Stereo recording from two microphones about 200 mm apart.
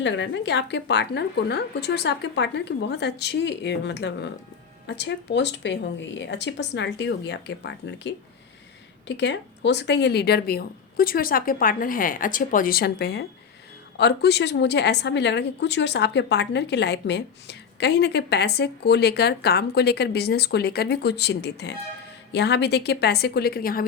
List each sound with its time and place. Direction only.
0.0 s a woman's voice: 65° left (ahead or behind); by 23.8 s 45° left (ahead or behind)